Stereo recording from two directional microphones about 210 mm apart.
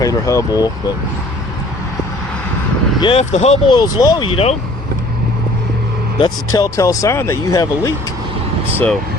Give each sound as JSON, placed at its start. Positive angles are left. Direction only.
{"t": 0.0, "sound": "speech", "side_deg": 15}
{"t": 3.0, "sound": "speech", "side_deg": 30}
{"t": 3.8, "sound": "speech", "side_deg": 20}
{"t": 6.1, "sound": "speech", "side_deg": 20}